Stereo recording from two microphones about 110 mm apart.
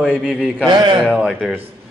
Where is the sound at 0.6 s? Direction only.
45° right (ahead or behind).